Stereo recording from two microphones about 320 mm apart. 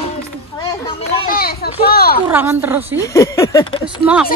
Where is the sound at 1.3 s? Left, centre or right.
Left.